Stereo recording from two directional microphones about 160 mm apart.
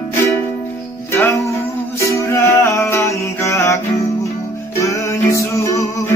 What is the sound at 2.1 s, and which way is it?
Music, 20° left (ahead or behind).